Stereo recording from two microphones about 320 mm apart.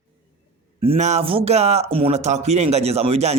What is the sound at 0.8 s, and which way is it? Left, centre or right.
Speech, centre.